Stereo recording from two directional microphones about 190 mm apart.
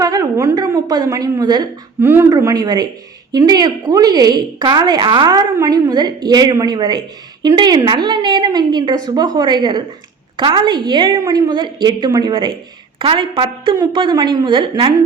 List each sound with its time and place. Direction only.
0.0 s a woman's voice: 15° right (ahead or behind)